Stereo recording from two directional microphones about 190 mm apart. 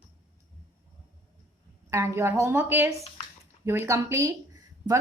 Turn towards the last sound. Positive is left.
turn(degrees=-15)  # may be behind; listen again after turning